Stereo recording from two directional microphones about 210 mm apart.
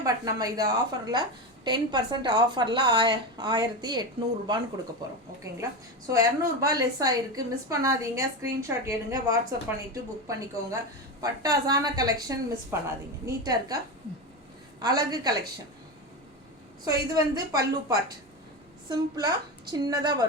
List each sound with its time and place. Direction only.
0.0 s a woman's voice: 15° right (ahead or behind)
6.1 s a woman's voice: 15° right (ahead or behind)
14.8 s a woman's voice: 20° right (ahead or behind)
16.8 s a woman's voice: 15° right (ahead or behind)